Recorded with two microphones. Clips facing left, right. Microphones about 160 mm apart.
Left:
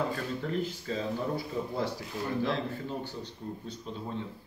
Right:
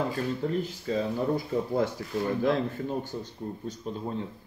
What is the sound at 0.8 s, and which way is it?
A man's voice, 45° right (ahead or behind).